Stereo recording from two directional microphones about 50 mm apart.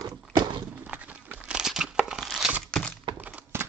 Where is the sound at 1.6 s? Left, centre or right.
Centre.